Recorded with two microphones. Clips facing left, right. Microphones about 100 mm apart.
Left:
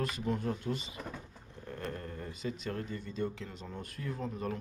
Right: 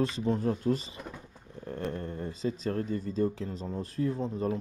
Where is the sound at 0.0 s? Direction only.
30° right (ahead or behind).